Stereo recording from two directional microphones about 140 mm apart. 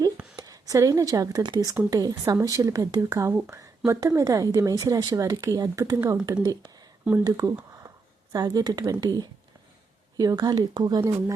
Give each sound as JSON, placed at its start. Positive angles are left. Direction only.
{"t": 0.3, "sound": "a woman's voice", "side_deg": -25}